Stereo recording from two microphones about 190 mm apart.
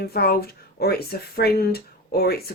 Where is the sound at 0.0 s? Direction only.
55° left (ahead or behind).